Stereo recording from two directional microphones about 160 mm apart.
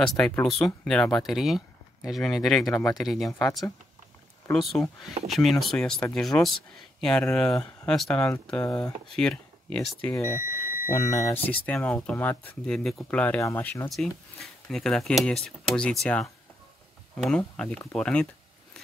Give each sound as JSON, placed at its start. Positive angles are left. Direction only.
{"t": 0.0, "sound": "speech", "side_deg": 5}
{"t": 3.3, "sound": "speech", "side_deg": 15}
{"t": 4.7, "sound": "speech", "side_deg": 5}
{"t": 13.8, "sound": "speech", "side_deg": 0}